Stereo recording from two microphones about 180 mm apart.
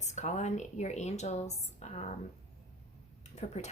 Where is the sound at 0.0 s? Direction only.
40° left (ahead or behind).